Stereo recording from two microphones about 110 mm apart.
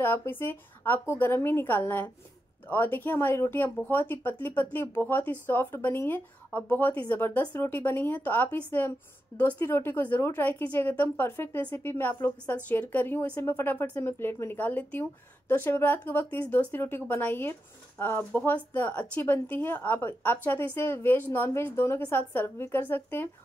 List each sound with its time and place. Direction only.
0.0 s a woman's voice: 20° left (ahead or behind)